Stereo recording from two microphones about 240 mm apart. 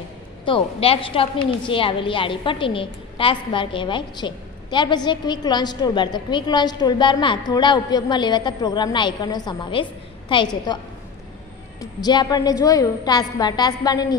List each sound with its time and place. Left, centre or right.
0.5 s a woman's voice: left
11.8 s a woman's voice: centre